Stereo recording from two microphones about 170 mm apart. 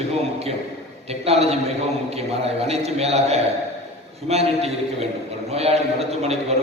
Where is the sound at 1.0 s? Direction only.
35° right (ahead or behind).